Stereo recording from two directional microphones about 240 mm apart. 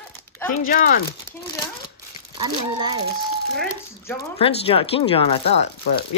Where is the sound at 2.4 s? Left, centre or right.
Centre.